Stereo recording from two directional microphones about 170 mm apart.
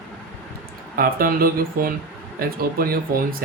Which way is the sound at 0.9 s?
60° right (ahead or behind).